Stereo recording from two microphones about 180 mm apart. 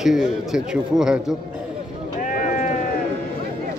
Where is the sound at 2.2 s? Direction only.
50° left (ahead or behind).